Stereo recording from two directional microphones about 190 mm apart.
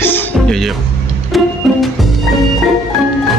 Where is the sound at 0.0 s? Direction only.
10° left (ahead or behind).